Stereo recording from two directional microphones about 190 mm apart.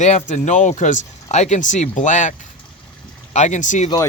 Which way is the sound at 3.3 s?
40° left (ahead or behind).